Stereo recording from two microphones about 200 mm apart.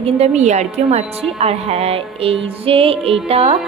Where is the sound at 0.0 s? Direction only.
30° right (ahead or behind).